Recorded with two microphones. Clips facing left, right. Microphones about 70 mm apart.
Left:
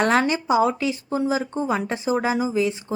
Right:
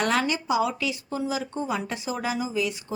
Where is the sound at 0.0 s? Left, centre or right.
Left.